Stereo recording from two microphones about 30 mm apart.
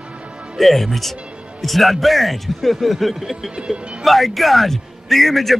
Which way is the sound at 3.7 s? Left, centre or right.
Right.